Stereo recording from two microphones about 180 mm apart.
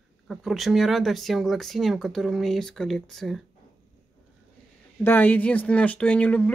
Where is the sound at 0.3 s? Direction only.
Centre (ahead or behind).